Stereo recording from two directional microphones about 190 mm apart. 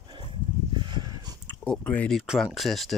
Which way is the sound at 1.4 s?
5° left (ahead or behind).